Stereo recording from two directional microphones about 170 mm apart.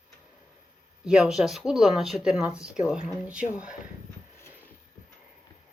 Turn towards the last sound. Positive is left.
turn(degrees=-5)  # may be behind; listen again after turning